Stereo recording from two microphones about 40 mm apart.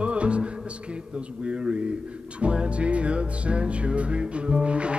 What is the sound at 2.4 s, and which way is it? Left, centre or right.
Music, right.